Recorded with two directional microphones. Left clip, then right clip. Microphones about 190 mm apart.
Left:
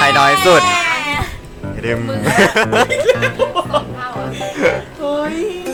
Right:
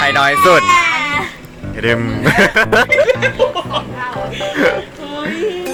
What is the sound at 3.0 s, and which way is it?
Speech, 40° left (ahead or behind).